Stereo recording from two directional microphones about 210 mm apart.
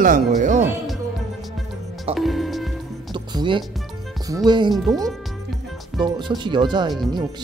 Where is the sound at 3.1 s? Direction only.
20° right (ahead or behind).